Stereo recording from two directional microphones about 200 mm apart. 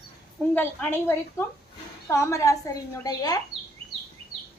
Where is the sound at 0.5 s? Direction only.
10° left (ahead or behind).